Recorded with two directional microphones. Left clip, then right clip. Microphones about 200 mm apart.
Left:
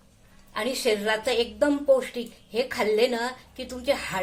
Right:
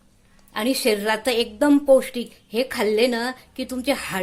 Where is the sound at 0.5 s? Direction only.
45° right (ahead or behind).